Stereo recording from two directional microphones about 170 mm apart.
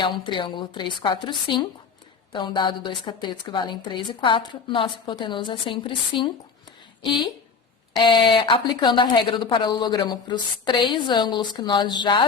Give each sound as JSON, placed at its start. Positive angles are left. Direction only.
{"t": 0.0, "sound": "a woman's voice", "side_deg": 30}